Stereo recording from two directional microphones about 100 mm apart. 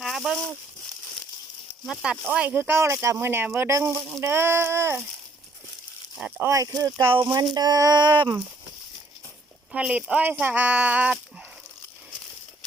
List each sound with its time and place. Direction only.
0.0 s a sound: centre (ahead or behind)
1.8 s speech: 5° right (ahead or behind)
2.3 s speech: 15° right (ahead or behind)
6.1 s speech: 10° right (ahead or behind)
6.4 s speech: 30° right (ahead or behind); by 8.4 s 45° right (ahead or behind)
9.7 s speech: 10° right (ahead or behind)